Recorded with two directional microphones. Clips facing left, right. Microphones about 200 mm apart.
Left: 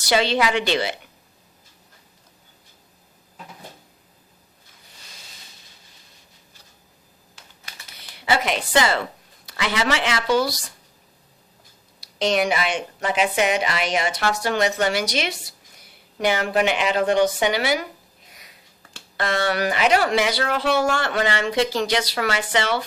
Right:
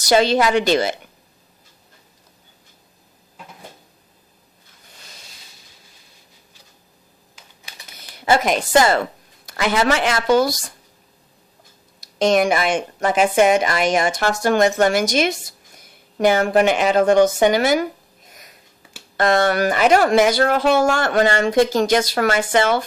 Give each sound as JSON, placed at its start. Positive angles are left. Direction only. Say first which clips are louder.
{"t": 0.0, "sound": "speech", "louder": "right 5 dB", "side_deg": -45}
{"t": 7.9, "sound": "a woman's voice", "louder": "right 5 dB", "side_deg": -45}
{"t": 11.9, "sound": "speech", "louder": "right 5 dB", "side_deg": -45}
{"t": 18.3, "sound": "sniff", "louder": "right 4 dB", "side_deg": -45}
{"t": 19.1, "sound": "speech", "louder": "right 6 dB", "side_deg": -45}